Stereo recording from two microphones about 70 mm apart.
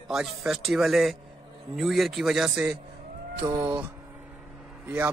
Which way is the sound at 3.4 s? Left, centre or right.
Right.